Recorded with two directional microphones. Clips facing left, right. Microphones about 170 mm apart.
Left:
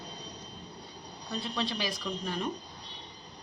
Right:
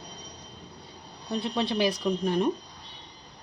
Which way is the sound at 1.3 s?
60° right (ahead or behind).